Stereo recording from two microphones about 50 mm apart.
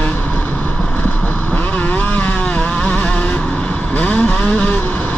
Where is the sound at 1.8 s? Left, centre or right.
Left.